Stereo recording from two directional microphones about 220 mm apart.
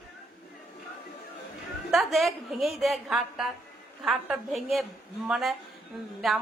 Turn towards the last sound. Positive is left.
turn(degrees=0)  # may be behind; listen again after turning